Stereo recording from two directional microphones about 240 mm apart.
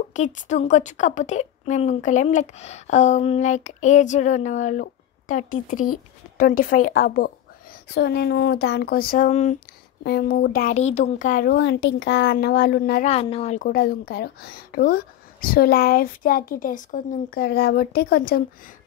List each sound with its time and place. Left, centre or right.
0.1 s a woman's voice: left
10.0 s speech: left
13.1 s speech: left